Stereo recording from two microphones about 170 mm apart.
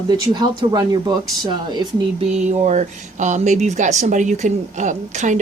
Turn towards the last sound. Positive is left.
turn(degrees=-45)  # may be behind; listen again after turning